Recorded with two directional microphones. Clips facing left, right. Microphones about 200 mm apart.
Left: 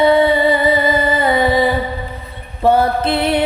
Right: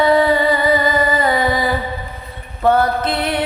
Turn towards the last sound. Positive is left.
turn(degrees=25)  # may be behind; listen again after turning